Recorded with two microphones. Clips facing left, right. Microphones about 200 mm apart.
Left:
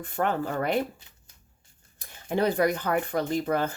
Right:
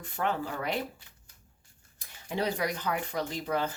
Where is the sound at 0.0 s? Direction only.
50° left (ahead or behind).